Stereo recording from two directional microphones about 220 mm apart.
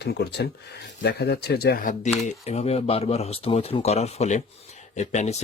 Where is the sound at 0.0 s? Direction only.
50° left (ahead or behind).